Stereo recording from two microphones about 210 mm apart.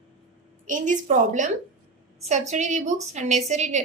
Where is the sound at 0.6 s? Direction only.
35° right (ahead or behind).